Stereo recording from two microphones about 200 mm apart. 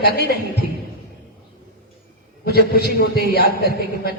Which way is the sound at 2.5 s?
50° left (ahead or behind).